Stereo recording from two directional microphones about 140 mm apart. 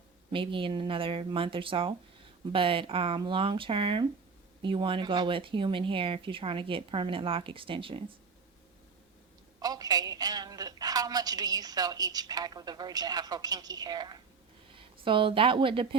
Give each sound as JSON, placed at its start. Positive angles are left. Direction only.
{"t": 0.3, "sound": "speech", "side_deg": -35}
{"t": 9.6, "sound": "a woman's voice", "side_deg": -25}